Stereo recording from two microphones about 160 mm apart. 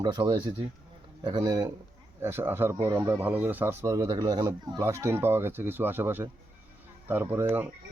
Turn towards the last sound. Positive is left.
turn(degrees=-15)  # may be behind; listen again after turning